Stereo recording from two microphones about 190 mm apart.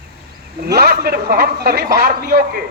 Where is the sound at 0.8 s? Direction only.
55° right (ahead or behind).